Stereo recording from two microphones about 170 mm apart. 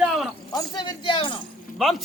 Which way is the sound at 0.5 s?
25° left (ahead or behind).